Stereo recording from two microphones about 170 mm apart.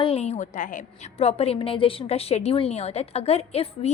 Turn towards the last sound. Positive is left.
turn(degrees=35)  # may be behind; listen again after turning